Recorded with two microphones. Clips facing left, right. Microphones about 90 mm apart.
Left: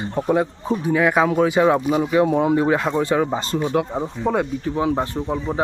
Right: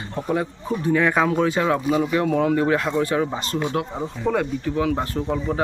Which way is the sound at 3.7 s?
15° left (ahead or behind).